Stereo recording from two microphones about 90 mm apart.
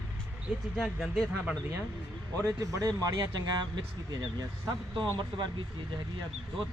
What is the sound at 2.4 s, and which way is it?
Speech, 35° right (ahead or behind).